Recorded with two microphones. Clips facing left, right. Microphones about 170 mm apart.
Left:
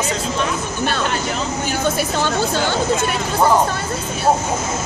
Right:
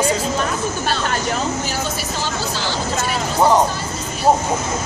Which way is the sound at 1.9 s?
55° left (ahead or behind).